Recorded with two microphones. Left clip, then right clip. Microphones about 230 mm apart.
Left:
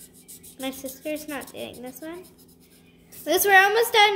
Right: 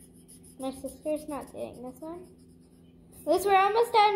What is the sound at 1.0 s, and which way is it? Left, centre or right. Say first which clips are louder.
Speech: left 1 dB; left.